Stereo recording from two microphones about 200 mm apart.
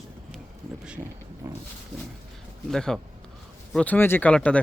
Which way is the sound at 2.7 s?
Centre (ahead or behind).